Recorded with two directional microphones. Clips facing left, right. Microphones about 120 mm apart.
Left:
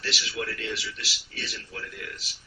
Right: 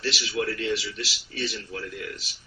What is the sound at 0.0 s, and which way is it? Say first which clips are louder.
Speech: right 5 dB; 25° right (ahead or behind).